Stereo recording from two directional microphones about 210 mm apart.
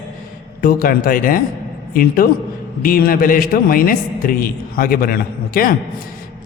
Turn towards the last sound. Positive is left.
turn(degrees=45)  # may be behind; listen again after turning